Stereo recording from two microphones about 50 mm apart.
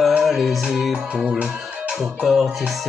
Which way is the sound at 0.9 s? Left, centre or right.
Centre.